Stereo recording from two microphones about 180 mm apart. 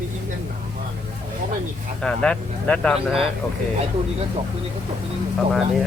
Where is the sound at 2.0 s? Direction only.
5° left (ahead or behind).